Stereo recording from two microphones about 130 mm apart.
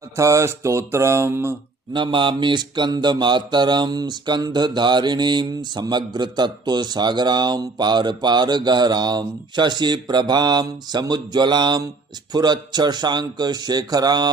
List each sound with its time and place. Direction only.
0.2 s mantra: 25° right (ahead or behind)
1.9 s mantra: 35° right (ahead or behind)